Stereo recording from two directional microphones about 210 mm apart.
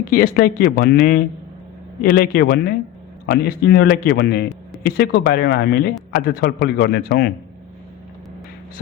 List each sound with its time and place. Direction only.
0.1 s a man's voice: 45° left (ahead or behind)